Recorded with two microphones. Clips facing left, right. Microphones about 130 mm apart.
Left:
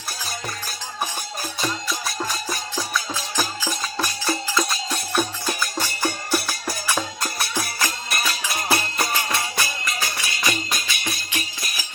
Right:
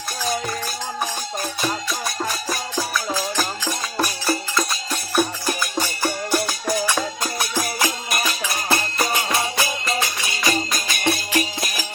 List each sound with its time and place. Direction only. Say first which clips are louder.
1.9 s music: right 2 dB; centre (ahead or behind)
5.5 s music: right 2 dB; 15° right (ahead or behind)
8.3 s music: left 1 dB; centre (ahead or behind)
9.1 s music: right 3 dB; 20° right (ahead or behind)
10.5 s music: right 4 dB; 40° right (ahead or behind)
11.1 s music: right 9 dB; 90° right